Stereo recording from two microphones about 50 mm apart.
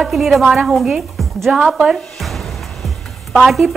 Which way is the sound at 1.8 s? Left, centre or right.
Centre.